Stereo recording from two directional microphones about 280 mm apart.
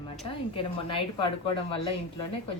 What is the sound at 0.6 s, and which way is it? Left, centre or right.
Speech, centre.